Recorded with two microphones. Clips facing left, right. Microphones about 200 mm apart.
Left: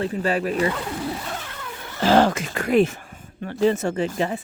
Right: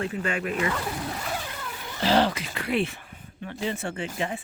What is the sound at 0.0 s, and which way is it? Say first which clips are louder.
Speech: left 6 dB; 35° left (ahead or behind).